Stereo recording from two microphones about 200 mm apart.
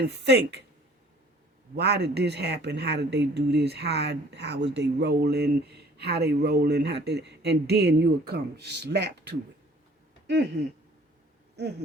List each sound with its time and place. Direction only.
0.0 s speech: 55° right (ahead or behind)
1.7 s speech: 55° right (ahead or behind)